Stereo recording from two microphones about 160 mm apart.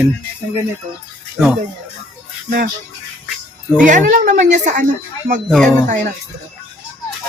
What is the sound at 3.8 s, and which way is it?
A woman's voice, 55° right (ahead or behind).